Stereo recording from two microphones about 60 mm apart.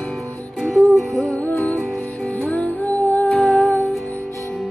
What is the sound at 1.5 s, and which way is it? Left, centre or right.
Music, left.